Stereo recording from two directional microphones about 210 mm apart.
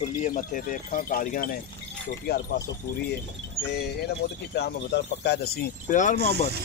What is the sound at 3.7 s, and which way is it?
Speech, 50° left (ahead or behind).